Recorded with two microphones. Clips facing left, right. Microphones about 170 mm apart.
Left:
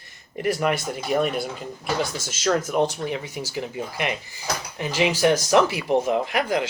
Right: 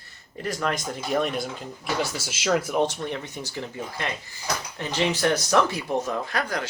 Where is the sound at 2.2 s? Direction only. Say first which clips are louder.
Left 1 dB; 10° right (ahead or behind).